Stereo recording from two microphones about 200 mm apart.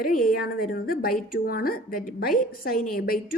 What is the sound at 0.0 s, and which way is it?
Speech, 45° left (ahead or behind).